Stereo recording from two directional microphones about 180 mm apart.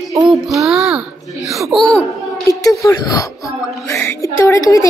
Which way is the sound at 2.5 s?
20° left (ahead or behind).